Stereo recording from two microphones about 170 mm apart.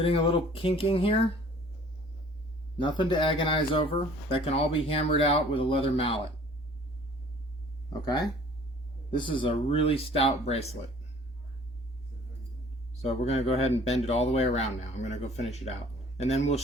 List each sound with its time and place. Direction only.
0.0 s speech: 35° left (ahead or behind)
2.7 s speech: 25° left (ahead or behind)
8.0 s speech: 25° left (ahead or behind)
13.0 s speech: 40° left (ahead or behind)